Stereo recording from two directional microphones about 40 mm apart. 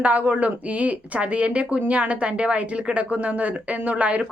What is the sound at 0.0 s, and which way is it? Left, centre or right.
A woman's voice, right.